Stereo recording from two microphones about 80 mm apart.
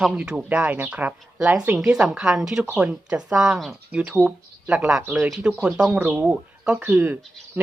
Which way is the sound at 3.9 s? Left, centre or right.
Centre.